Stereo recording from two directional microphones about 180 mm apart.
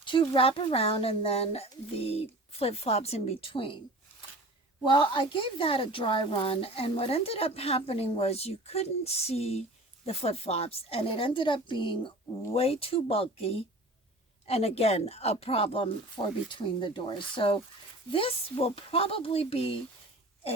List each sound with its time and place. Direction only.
0.0 s speech: 30° left (ahead or behind)
4.9 s speech: 25° left (ahead or behind)